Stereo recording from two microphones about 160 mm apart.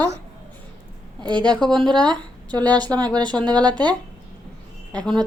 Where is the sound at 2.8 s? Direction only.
25° right (ahead or behind).